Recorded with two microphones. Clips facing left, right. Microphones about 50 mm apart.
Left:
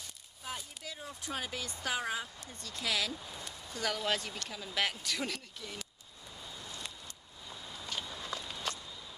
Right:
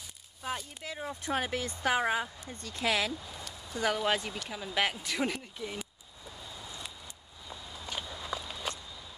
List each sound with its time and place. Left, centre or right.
0.8 s speech: right
3.7 s speech: centre
7.4 s walk: centre